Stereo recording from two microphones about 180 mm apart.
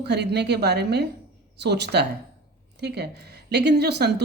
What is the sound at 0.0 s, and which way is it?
A woman's voice, 70° right (ahead or behind).